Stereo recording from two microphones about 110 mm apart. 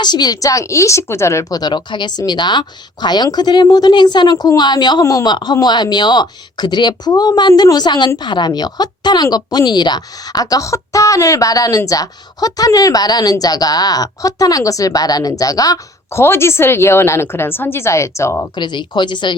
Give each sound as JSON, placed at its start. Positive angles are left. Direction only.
{"t": 0.0, "sound": "a woman's voice", "side_deg": 40}
{"t": 18.5, "sound": "a woman's voice", "side_deg": 45}